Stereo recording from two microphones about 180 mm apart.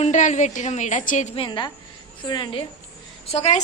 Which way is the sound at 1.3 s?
25° left (ahead or behind).